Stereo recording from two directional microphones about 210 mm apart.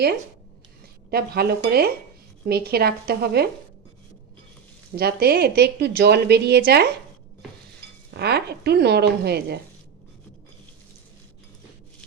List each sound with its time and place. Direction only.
1.1 s a woman's voice: 45° right (ahead or behind)
4.9 s a woman's voice: 50° right (ahead or behind)
8.1 s a woman's voice: 50° right (ahead or behind)